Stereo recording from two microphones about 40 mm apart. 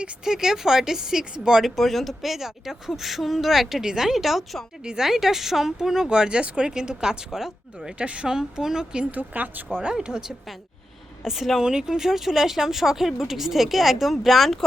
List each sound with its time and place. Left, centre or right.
0.3 s speech: centre
1.6 s speech: centre
4.8 s a woman's voice: centre
5.0 s speech: centre
7.9 s a woman's voice: right
8.3 s speech: centre
9.1 s speech: right
9.9 s speech: centre